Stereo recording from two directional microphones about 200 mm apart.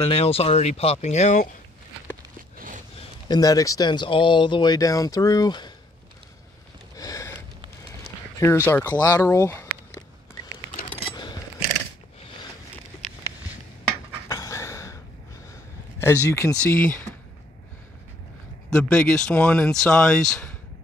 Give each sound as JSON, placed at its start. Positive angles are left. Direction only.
{"t": 0.0, "sound": "speech", "side_deg": 30}
{"t": 2.5, "sound": "a sound", "side_deg": -40}
{"t": 3.3, "sound": "speech", "side_deg": 20}
{"t": 7.0, "sound": "sniff", "side_deg": 15}
{"t": 8.6, "sound": "speech", "side_deg": 10}
{"t": 10.9, "sound": "coin", "side_deg": 20}
{"t": 14.3, "sound": "pant", "side_deg": 15}
{"t": 16.0, "sound": "speech", "side_deg": 15}
{"t": 18.7, "sound": "speech", "side_deg": 5}